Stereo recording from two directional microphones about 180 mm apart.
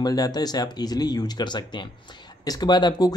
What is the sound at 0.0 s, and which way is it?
Speech, 20° left (ahead or behind).